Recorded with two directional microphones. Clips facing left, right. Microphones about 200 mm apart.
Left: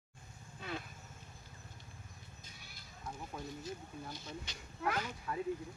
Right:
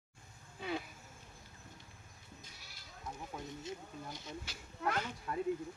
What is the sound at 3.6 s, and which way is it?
Speech, 20° right (ahead or behind).